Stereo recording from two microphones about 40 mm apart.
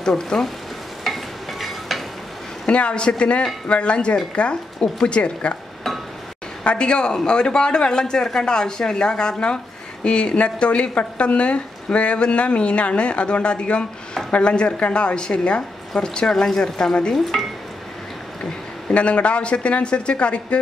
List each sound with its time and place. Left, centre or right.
0.0 s speech: centre
1.0 s stir: centre
2.6 s speech: left
6.6 s speech: left
17.1 s speech: centre
18.4 s speech: left